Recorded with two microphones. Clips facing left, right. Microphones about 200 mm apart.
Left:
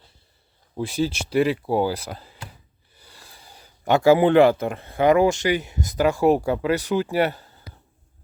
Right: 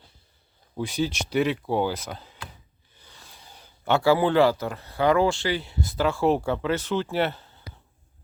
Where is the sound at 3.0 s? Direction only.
10° left (ahead or behind).